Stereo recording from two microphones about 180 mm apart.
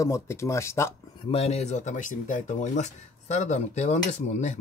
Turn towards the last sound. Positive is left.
turn(degrees=40)  # may be behind; listen again after turning